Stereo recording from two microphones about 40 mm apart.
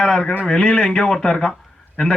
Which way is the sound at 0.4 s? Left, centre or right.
Left.